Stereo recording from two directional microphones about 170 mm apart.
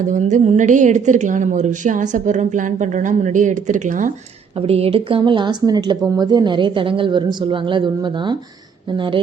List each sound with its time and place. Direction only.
0.1 s a woman's voice: 45° right (ahead or behind)
4.5 s a woman's voice: 35° right (ahead or behind)